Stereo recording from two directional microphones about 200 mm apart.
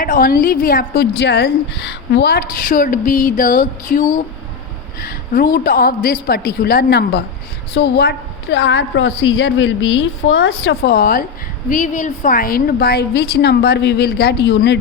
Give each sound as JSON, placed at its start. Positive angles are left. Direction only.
{"t": 0.0, "sound": "a woman's voice", "side_deg": 45}
{"t": 10.2, "sound": "a woman's voice", "side_deg": 90}
{"t": 10.8, "sound": "a woman's voice", "side_deg": 50}